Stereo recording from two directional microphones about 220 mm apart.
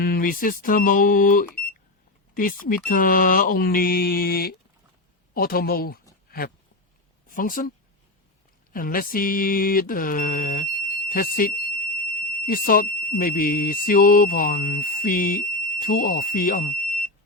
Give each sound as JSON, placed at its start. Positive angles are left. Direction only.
{"t": 0.0, "sound": "a woman's voice", "side_deg": 40}
{"t": 8.7, "sound": "mantra", "side_deg": 40}
{"t": 12.2, "sound": "speech", "side_deg": 40}